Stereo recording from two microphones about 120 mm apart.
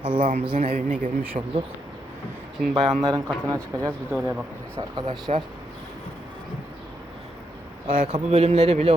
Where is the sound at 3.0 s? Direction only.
30° right (ahead or behind).